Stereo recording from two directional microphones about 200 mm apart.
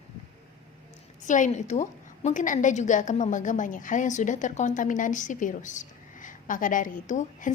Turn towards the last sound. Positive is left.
turn(degrees=40)  # may be behind; listen again after turning